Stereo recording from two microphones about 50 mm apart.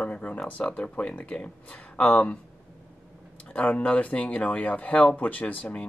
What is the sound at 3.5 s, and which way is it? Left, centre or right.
Speech, left.